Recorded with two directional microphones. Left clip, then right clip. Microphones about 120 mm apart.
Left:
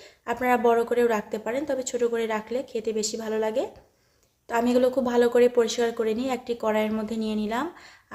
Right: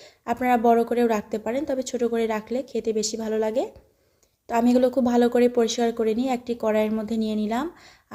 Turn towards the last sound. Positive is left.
turn(degrees=-40)  # may be behind; listen again after turning